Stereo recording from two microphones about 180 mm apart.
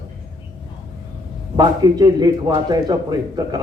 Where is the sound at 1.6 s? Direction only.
20° right (ahead or behind).